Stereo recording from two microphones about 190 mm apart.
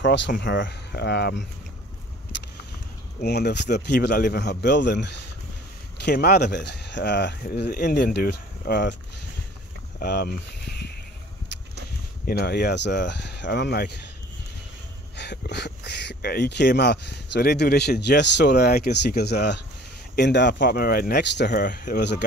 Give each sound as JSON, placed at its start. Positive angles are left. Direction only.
{"t": 0.0, "sound": "speech", "side_deg": 70}
{"t": 3.2, "sound": "speech", "side_deg": 60}
{"t": 9.9, "sound": "a sound", "side_deg": 60}
{"t": 12.3, "sound": "speech", "side_deg": 55}
{"t": 15.1, "sound": "speech", "side_deg": 60}